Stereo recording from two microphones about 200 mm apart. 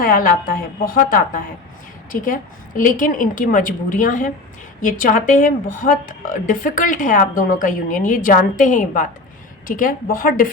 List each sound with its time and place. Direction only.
0.0 s a woman's voice: 45° left (ahead or behind)